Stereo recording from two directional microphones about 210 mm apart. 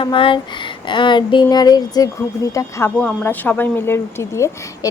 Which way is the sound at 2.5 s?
15° left (ahead or behind).